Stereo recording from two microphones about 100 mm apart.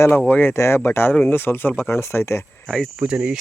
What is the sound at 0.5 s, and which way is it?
Speech, 25° left (ahead or behind).